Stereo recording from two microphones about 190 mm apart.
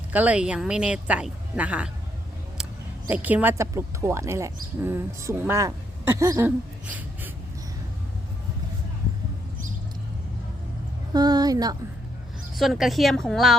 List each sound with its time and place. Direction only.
0.1 s a woman's voice: 5° right (ahead or behind)
3.1 s a woman's voice: 10° right (ahead or behind)
11.1 s a woman's voice: 20° right (ahead or behind)
12.5 s a woman's voice: centre (ahead or behind)